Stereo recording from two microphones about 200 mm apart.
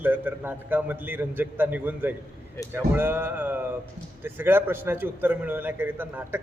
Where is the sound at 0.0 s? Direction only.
10° right (ahead or behind).